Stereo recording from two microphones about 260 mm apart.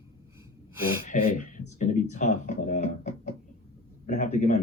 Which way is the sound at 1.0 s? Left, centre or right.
Left.